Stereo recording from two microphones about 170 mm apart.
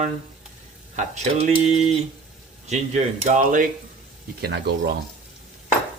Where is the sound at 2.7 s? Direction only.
40° right (ahead or behind).